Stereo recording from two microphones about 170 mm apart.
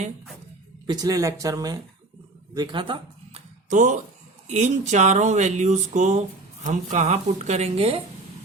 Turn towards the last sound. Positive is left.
turn(degrees=-40)  # may be behind; listen again after turning